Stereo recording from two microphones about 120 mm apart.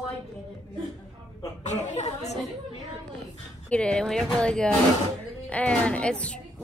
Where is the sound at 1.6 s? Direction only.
80° left.